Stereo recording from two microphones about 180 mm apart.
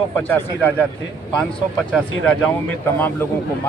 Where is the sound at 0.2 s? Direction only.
10° left (ahead or behind).